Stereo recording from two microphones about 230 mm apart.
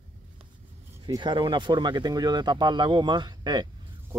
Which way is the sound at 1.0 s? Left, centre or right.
Centre.